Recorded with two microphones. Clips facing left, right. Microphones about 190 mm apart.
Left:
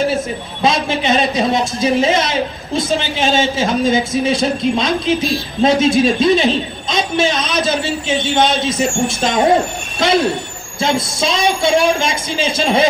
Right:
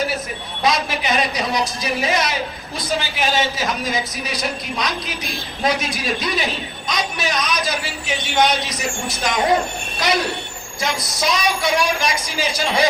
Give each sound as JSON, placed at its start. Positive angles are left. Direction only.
{"t": 0.0, "sound": "speech", "side_deg": 25}